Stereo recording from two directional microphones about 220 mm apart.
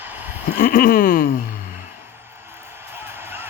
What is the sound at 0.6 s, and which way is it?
Speech, 40° left (ahead or behind).